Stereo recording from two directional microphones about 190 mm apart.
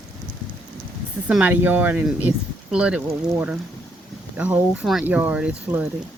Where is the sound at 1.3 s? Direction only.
5° right (ahead or behind).